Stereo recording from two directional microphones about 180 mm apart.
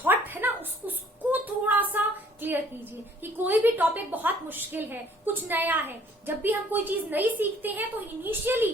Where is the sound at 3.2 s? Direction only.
10° right (ahead or behind).